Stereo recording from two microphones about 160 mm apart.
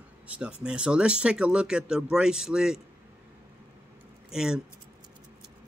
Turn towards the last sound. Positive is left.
turn(degrees=-5)  # may be behind; listen again after turning